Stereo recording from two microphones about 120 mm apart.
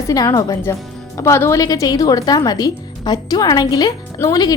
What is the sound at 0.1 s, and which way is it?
Speech, 30° left (ahead or behind).